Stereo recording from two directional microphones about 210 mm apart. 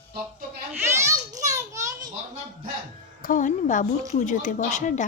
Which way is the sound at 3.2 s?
40° left (ahead or behind).